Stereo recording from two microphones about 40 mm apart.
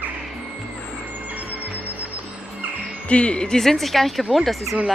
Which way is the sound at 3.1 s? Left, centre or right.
Left.